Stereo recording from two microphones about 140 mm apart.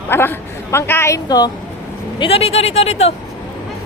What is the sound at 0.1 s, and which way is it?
Speech, 15° left (ahead or behind).